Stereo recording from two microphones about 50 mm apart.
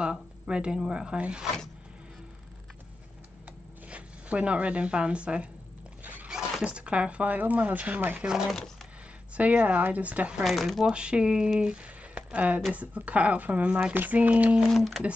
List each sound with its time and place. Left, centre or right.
0.0 s speech: centre
3.9 s speech: right
6.6 s speech: right
8.2 s speech: centre
9.4 s speech: right
10.4 s speech: centre
10.9 s speech: right
13.9 s speech: right
14.7 s speech: centre